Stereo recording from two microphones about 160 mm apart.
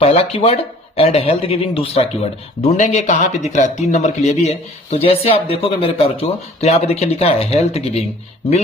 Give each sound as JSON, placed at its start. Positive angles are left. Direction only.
{"t": 0.0, "sound": "speech", "side_deg": 40}